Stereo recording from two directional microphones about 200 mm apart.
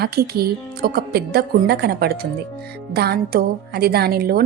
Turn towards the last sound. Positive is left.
turn(degrees=-50)  # may be behind; listen again after turning